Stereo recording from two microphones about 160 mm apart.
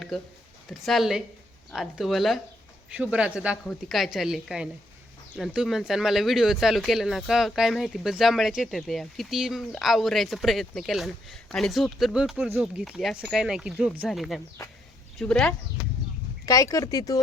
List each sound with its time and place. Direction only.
0.1 s speech: centre (ahead or behind)
16.5 s speech: 20° left (ahead or behind)